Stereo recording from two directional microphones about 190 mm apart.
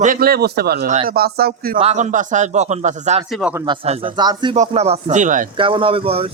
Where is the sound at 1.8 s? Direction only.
35° right (ahead or behind).